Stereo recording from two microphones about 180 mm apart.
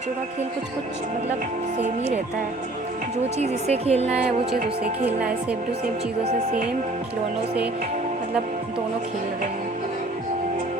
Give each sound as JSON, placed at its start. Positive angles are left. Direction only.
{"t": 3.3, "sound": "speech", "side_deg": -35}
{"t": 4.8, "sound": "speech", "side_deg": -5}